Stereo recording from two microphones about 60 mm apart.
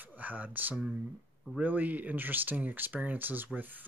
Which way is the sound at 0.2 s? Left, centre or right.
Right.